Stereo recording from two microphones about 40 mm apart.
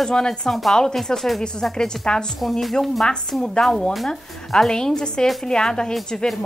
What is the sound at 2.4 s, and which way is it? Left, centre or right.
Speech, centre.